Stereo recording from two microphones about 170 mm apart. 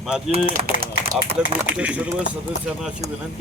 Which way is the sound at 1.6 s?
5° right (ahead or behind).